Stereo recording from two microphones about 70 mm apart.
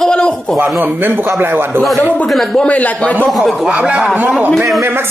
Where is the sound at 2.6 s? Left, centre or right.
Left.